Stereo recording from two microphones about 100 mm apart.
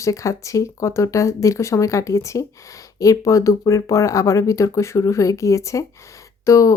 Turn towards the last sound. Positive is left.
turn(degrees=30)  # may be behind; listen again after turning